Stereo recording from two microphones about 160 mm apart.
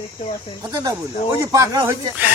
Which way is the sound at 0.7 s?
20° right (ahead or behind).